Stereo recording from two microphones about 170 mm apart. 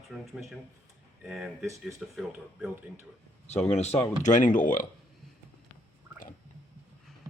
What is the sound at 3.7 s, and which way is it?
Speech, 40° left (ahead or behind).